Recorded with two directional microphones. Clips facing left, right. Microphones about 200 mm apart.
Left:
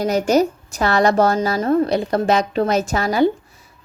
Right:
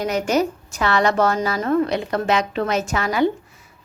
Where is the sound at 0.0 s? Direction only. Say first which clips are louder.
Left 4 dB; 35° left (ahead or behind).